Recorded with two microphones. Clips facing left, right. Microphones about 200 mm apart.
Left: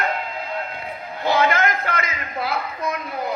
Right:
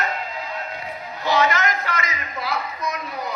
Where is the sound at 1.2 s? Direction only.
55° left (ahead or behind).